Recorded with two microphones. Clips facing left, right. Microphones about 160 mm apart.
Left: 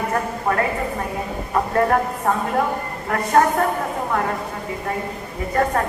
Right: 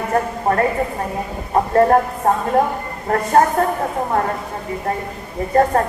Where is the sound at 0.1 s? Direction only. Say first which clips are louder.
Right 4 dB; 35° right (ahead or behind).